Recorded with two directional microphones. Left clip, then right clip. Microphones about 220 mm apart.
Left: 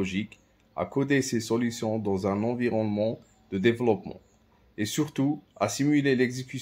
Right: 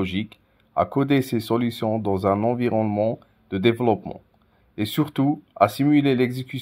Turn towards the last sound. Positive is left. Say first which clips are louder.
# right 3 dB
turn(degrees=-35)  # may be behind; listen again after turning